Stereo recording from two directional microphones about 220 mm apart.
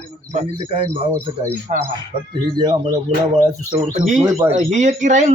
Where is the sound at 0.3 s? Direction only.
30° right (ahead or behind).